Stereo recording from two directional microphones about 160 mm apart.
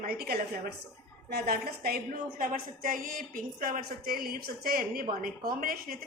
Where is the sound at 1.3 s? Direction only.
70° right (ahead or behind).